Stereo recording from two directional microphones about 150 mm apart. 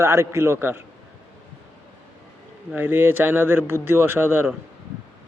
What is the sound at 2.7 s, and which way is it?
A man's voice, 15° right (ahead or behind).